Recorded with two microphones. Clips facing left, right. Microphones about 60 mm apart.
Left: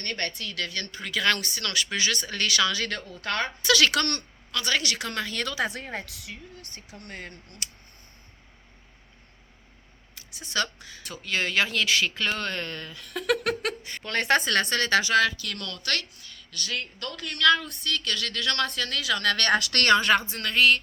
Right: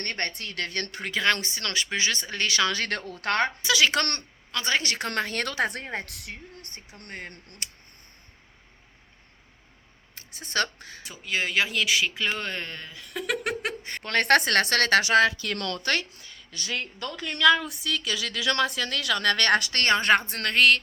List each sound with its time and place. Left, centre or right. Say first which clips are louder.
0.0 s speech: right 1 dB; right
1.1 s a woman's voice: even; right
2.6 s a woman's voice: right 1 dB; right
3.6 s speech: left 1 dB; centre
4.1 s a woman's voice: left 1 dB; right
6.6 s a woman's voice: left 1 dB; right
10.2 s speech: right 1 dB; right
11.0 s speech: even; centre
13.8 s a woman's voice: right 4 dB; right
15.8 s a woman's voice: right 3 dB; right
17.4 s a woman's voice: right 2 dB; centre
19.7 s speech: left 3 dB; centre
20.0 s speech: right 1 dB; right
20.3 s a woman's voice: right 1 dB; right